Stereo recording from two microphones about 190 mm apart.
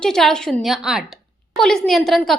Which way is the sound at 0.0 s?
5° left (ahead or behind).